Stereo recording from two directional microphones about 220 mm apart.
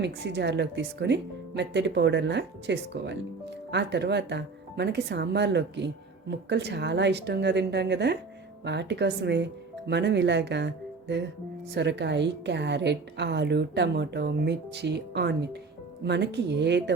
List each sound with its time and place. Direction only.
0.0 s a woman's voice: 50° right (ahead or behind)
11.7 s a woman's voice: 50° right (ahead or behind)